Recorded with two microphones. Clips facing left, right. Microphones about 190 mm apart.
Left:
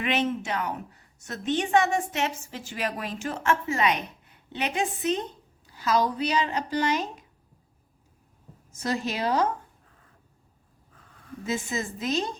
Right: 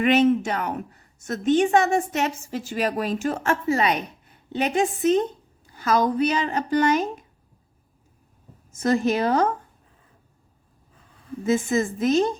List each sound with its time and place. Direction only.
0.0 s a woman's voice: 45° right (ahead or behind)
8.7 s a woman's voice: 50° right (ahead or behind)
11.4 s a woman's voice: 50° right (ahead or behind)